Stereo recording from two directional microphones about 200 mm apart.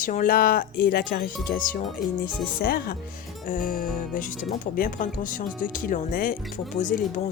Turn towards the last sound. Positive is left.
turn(degrees=40)  # may be behind; listen again after turning